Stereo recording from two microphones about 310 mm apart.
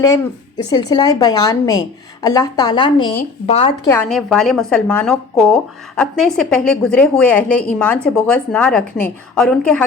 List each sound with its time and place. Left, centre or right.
0.0 s a woman's voice: centre
3.8 s a woman's voice: centre